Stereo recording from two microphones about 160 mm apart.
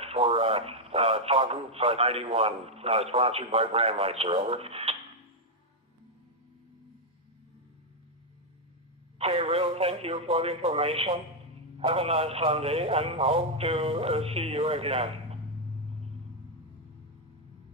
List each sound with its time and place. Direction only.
0.0 s speech: 40° right (ahead or behind)
9.2 s speech: 35° right (ahead or behind)